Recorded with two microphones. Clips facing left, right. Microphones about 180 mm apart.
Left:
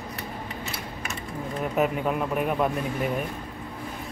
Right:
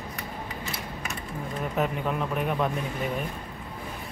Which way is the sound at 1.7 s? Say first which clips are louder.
Left 3 dB; 5° left (ahead or behind).